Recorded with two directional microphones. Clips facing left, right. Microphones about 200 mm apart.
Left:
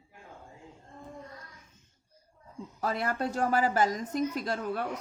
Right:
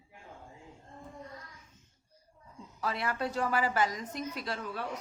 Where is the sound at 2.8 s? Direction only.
45° left (ahead or behind).